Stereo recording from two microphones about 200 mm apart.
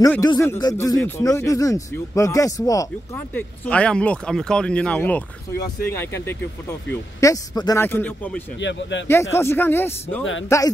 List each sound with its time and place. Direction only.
0.0 s speech: 15° left (ahead or behind)
8.5 s speech: 65° left (ahead or behind)
9.0 s speech: 15° left (ahead or behind)